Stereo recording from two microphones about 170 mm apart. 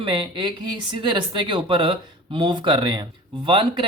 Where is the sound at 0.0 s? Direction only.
30° right (ahead or behind).